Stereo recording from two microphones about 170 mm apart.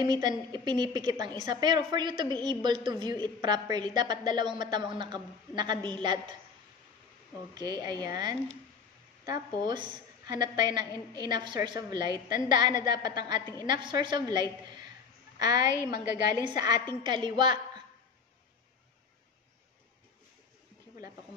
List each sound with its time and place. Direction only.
0.0 s a woman's voice: 25° right (ahead or behind)
7.5 s a woman's voice: 25° right (ahead or behind)